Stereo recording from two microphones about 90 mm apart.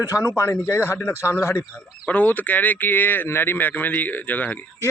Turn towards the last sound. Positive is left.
turn(degrees=20)  # may be behind; listen again after turning